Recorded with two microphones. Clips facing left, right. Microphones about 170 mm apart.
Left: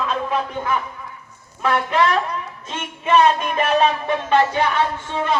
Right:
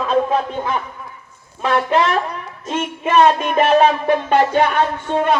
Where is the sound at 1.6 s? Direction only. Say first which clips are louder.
Right 3 dB; 25° right (ahead or behind).